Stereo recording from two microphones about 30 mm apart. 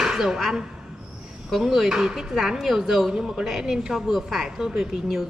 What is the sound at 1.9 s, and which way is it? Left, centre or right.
Speech, right.